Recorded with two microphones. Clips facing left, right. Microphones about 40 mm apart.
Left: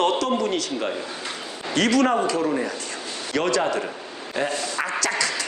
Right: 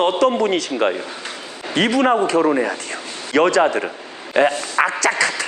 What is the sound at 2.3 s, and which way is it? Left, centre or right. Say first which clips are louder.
Speech: right 7 dB; right.